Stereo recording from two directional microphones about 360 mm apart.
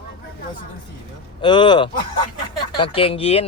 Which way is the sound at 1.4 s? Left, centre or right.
Centre.